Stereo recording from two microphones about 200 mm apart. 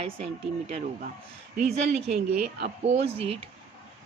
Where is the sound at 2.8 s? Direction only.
30° right (ahead or behind).